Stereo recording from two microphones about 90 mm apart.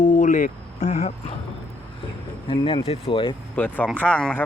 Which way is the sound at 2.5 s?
90° left.